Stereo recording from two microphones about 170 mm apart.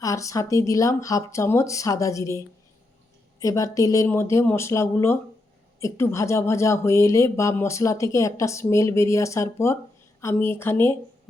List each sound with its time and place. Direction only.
0.0 s speech: 20° left (ahead or behind)
3.4 s speech: 20° left (ahead or behind)